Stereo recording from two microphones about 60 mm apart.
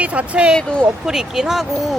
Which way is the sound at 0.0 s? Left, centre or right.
Right.